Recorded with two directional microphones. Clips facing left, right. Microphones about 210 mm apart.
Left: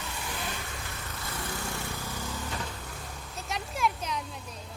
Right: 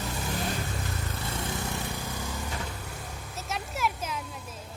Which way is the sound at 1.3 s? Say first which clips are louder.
Right 2 dB; 25° right (ahead or behind).